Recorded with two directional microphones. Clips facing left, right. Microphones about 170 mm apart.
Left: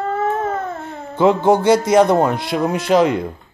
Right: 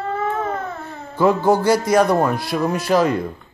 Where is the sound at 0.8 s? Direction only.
20° left (ahead or behind).